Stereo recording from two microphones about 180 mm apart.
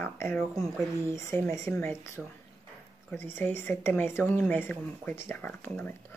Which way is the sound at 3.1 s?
10° left (ahead or behind).